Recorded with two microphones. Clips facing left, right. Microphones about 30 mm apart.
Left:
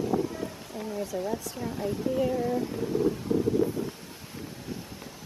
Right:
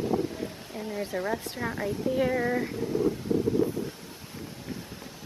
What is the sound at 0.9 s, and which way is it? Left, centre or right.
Speech, right.